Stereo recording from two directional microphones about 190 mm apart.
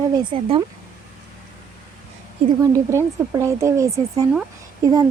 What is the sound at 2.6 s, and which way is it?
Speech, 15° right (ahead or behind).